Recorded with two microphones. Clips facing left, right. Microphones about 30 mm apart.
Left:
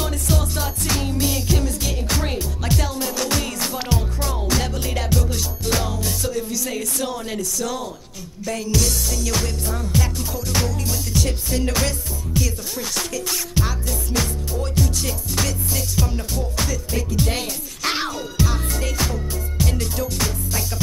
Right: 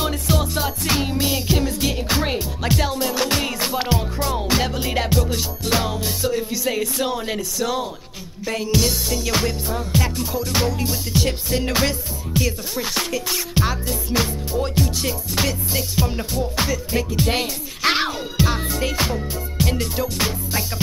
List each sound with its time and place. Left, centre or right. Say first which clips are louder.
0.0 s music: right 2 dB; right